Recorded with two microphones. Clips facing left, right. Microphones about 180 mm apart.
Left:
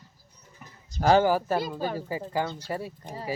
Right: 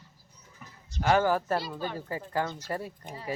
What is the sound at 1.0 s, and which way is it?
Speech, 30° left (ahead or behind).